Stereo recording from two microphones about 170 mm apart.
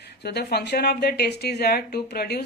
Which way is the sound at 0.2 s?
75° left (ahead or behind).